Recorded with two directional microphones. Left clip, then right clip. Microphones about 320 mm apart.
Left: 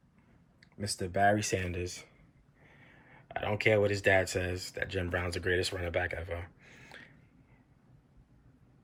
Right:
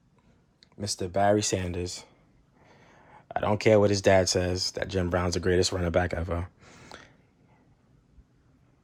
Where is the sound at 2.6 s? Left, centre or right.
Centre.